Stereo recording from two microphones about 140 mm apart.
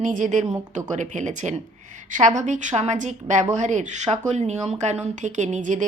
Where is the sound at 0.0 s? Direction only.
65° right (ahead or behind).